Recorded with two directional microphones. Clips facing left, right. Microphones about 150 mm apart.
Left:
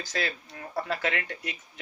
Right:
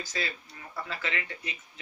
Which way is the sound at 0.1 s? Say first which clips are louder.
Left 4 dB; 65° left (ahead or behind).